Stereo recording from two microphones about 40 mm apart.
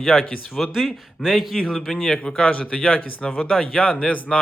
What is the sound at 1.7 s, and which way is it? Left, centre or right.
Speech, centre.